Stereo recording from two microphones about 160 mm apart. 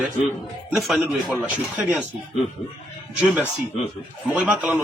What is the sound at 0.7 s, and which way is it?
A man's voice, centre (ahead or behind).